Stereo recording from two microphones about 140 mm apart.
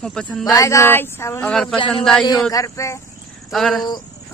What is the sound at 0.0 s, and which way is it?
Speech, 5° left (ahead or behind).